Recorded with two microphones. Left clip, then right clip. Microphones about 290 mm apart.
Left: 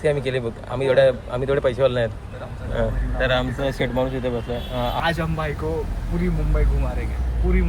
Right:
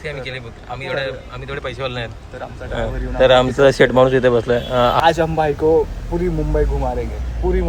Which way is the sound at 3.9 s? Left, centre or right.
Right.